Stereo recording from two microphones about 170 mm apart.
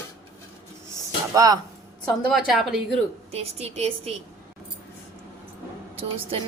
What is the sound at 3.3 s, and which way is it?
Speech, 35° right (ahead or behind).